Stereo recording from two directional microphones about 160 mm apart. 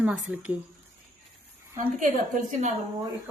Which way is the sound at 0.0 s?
5° right (ahead or behind).